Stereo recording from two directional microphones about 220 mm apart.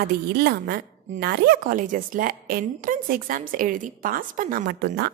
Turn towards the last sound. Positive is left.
turn(degrees=-45)  # may be behind; listen again after turning